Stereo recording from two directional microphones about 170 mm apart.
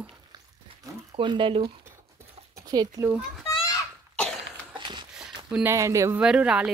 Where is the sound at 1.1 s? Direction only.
30° right (ahead or behind).